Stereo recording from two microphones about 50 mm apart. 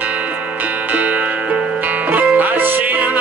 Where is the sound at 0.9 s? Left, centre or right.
Right.